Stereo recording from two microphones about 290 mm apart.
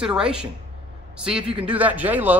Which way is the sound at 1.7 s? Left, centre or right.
Centre.